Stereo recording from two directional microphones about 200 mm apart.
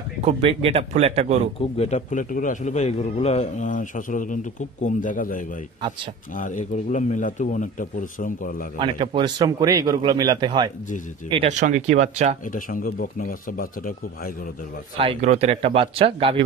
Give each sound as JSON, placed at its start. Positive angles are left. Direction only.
{"t": 0.2, "sound": "speech", "side_deg": -30}
{"t": 1.6, "sound": "a man's voice", "side_deg": 35}
{"t": 8.7, "sound": "speech", "side_deg": -25}
{"t": 11.4, "sound": "speech", "side_deg": -35}
{"t": 12.5, "sound": "speech", "side_deg": 45}
{"t": 15.0, "sound": "speech", "side_deg": -30}